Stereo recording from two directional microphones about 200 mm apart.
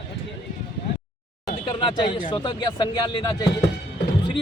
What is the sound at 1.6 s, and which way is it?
Speech, 20° left (ahead or behind).